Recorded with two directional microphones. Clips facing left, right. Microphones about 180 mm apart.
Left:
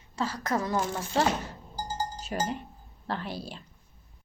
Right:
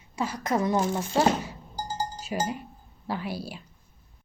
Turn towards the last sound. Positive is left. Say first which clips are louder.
# right 2 dB
turn(degrees=-10)  # may be behind; listen again after turning